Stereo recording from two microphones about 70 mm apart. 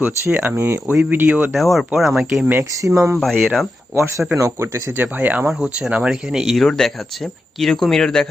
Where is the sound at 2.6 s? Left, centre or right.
Right.